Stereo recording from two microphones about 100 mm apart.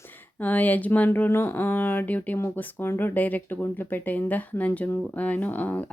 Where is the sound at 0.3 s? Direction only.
15° left (ahead or behind).